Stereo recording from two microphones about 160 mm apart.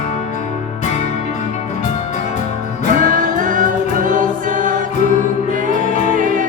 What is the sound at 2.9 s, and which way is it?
Music, 55° right (ahead or behind).